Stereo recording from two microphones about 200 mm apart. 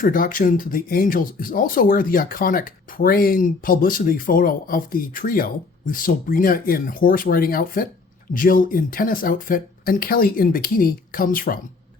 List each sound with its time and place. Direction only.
0.0 s speech: 45° left (ahead or behind)